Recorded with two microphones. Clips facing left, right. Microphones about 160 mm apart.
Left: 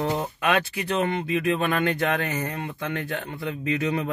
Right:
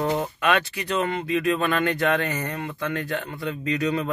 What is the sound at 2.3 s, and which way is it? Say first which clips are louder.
Speech: even; 20° left (ahead or behind).